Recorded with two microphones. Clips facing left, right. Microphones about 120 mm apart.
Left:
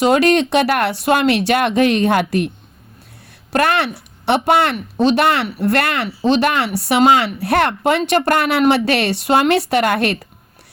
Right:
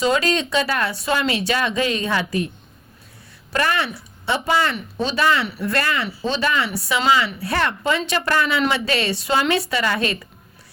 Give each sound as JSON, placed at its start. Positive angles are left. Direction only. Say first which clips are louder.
{"t": 0.0, "sound": "speech", "louder": "left 7 dB", "side_deg": 60}
{"t": 3.5, "sound": "speech", "louder": "left 5 dB", "side_deg": 65}